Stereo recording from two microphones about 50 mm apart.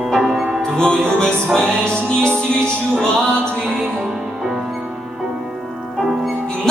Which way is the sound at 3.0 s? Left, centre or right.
Centre.